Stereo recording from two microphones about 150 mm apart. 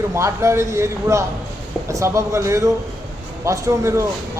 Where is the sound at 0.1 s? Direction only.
20° right (ahead or behind).